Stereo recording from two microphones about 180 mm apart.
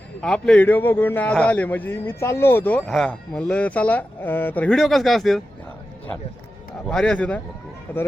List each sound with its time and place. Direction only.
0.2 s a man's voice: 5° left (ahead or behind)
6.9 s a man's voice: 5° left (ahead or behind)